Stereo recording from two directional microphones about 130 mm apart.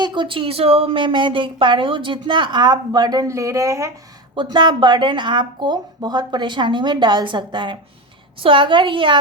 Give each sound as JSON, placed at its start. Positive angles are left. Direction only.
{"t": 0.0, "sound": "speech", "side_deg": -35}
{"t": 4.4, "sound": "speech", "side_deg": -35}